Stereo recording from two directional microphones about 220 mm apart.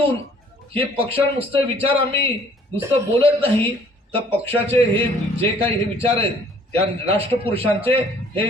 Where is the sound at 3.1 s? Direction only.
25° right (ahead or behind).